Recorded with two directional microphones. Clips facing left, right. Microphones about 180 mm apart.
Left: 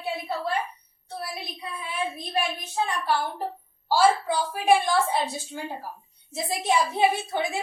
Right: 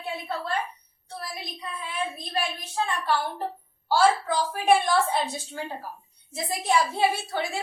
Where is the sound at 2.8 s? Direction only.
10° left (ahead or behind).